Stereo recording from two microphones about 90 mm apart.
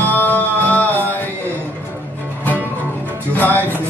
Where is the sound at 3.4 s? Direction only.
20° left (ahead or behind).